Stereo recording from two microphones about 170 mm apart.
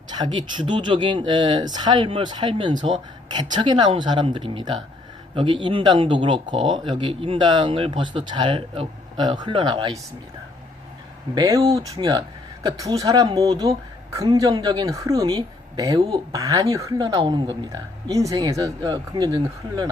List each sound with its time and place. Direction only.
0.1 s speech: 25° right (ahead or behind)
11.3 s speech: 20° right (ahead or behind)